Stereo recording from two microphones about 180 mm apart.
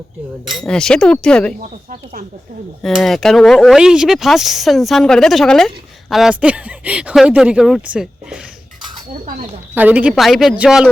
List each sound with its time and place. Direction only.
0.5 s speech: 5° left (ahead or behind)
2.8 s speech: centre (ahead or behind)
9.7 s speech: 10° right (ahead or behind)